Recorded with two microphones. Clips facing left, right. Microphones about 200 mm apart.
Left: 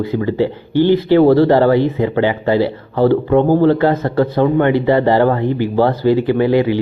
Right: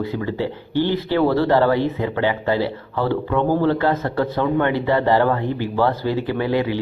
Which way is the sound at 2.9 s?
40° left (ahead or behind).